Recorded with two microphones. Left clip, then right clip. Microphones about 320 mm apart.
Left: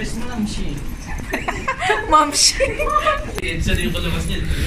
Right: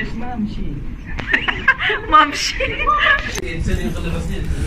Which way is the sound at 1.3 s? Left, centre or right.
Centre.